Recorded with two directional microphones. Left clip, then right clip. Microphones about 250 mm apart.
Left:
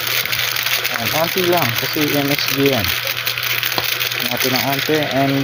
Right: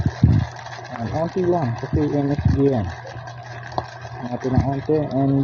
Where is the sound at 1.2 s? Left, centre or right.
Left.